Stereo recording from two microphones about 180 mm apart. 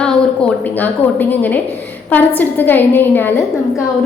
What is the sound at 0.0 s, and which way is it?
A woman's voice, 5° left (ahead or behind).